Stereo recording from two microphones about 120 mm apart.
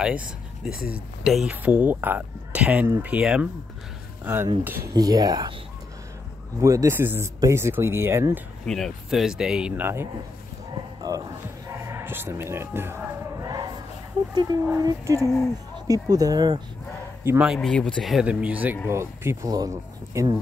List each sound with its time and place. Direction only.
0.0 s speech: 10° right (ahead or behind)
4.9 s speech: 35° right (ahead or behind)
6.6 s speech: 25° right (ahead or behind)
8.6 s speech: 5° left (ahead or behind)
11.0 s a sound: 30° right (ahead or behind)
11.7 s speech: 20° right (ahead or behind)
13.4 s a sound: 30° right (ahead or behind)
14.3 s speech: 35° right (ahead or behind)
17.3 s speech: 15° right (ahead or behind)
17.6 s speech: 5° left (ahead or behind)
18.2 s speech: 10° right (ahead or behind)